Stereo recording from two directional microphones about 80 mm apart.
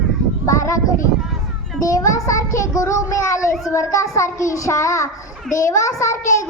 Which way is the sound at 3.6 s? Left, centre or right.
Left.